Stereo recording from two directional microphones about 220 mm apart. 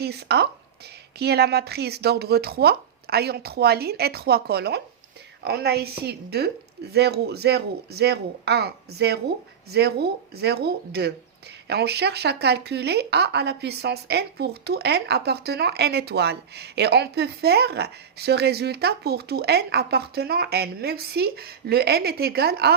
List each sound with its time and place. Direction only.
0.0 s speech: 50° right (ahead or behind)